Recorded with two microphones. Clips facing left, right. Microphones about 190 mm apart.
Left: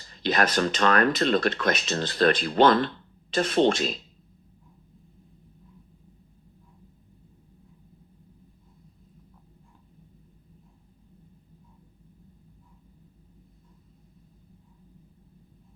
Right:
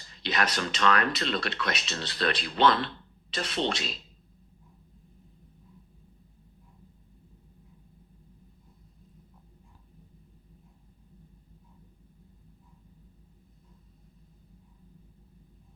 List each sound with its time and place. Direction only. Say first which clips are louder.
0.1 s speech: left 6 dB; 45° left (ahead or behind)